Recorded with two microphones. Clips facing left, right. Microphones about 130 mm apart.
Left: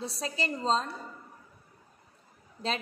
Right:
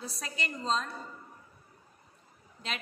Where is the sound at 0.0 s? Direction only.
30° left (ahead or behind).